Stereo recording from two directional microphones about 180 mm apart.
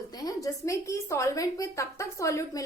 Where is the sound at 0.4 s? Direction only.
15° left (ahead or behind).